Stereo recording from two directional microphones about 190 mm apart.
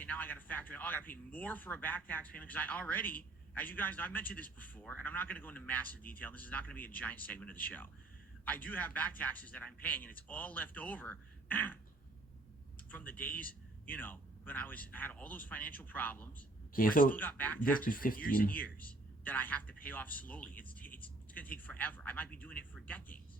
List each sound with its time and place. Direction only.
0.0 s a man's voice: 10° left (ahead or behind)
12.9 s a man's voice: 10° left (ahead or behind)
16.7 s speech: 50° left (ahead or behind)
17.2 s a man's voice: 10° left (ahead or behind)
17.8 s speech: 45° left (ahead or behind)
18.5 s a man's voice: 10° left (ahead or behind)